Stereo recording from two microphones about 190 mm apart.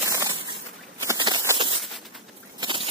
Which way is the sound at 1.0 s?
20° right (ahead or behind).